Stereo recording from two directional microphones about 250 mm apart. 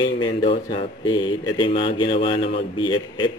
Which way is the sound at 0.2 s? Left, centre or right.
Left.